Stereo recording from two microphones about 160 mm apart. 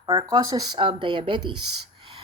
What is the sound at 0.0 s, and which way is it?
A woman's voice, 25° right (ahead or behind).